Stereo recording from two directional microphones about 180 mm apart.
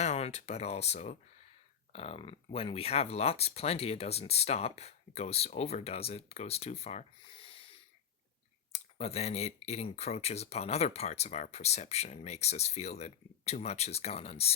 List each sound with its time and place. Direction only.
0.0 s speech: 40° left (ahead or behind)